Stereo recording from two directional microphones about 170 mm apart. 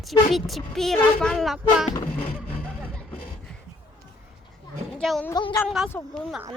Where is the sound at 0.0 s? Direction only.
Centre (ahead or behind).